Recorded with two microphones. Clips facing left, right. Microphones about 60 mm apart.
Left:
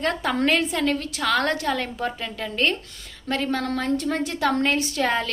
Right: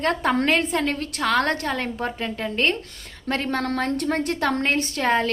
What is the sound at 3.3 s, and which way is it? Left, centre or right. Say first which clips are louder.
A woman's voice: even; right.